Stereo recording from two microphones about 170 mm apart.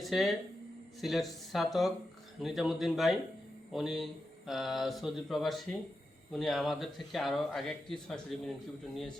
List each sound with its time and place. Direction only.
0.0 s speech: centre (ahead or behind)